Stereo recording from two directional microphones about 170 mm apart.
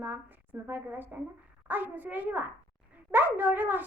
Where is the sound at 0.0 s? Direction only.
10° right (ahead or behind).